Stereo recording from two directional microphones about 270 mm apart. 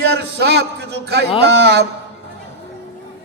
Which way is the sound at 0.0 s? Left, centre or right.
Right.